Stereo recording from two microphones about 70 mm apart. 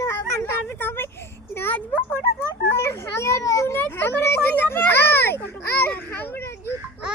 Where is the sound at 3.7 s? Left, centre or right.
Left.